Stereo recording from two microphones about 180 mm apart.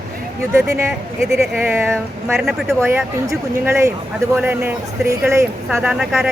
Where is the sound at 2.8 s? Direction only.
15° right (ahead or behind).